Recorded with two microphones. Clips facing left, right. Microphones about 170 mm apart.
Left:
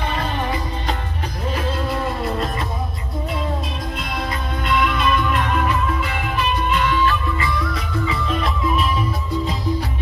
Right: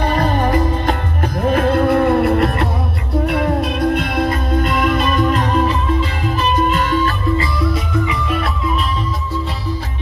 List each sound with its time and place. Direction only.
0.0 s music: 40° right (ahead or behind)
6.4 s music: 45° right (ahead or behind)